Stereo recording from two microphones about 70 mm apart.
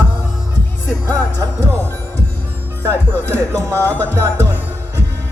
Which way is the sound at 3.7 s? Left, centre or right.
Left.